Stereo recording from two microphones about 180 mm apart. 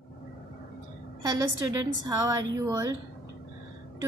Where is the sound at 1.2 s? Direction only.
20° right (ahead or behind).